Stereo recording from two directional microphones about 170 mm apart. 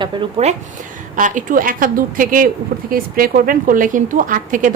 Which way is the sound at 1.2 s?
50° right (ahead or behind).